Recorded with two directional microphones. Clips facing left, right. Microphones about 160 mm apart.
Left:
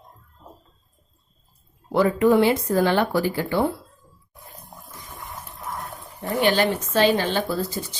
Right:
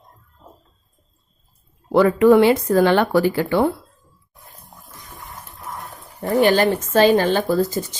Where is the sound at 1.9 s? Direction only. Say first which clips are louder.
Right 5 dB; 70° right (ahead or behind).